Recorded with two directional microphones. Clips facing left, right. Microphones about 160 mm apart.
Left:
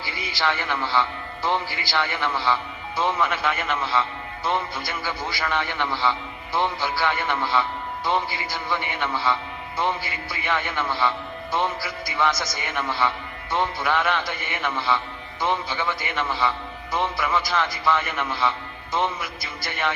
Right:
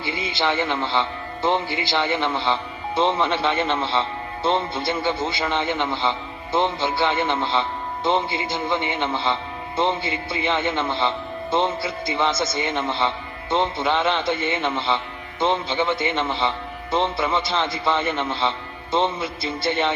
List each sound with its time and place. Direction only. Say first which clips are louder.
0.0 s a man's voice: right 3 dB; 20° right (ahead or behind)